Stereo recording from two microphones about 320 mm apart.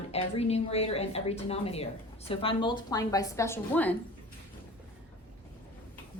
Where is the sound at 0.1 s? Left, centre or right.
Centre.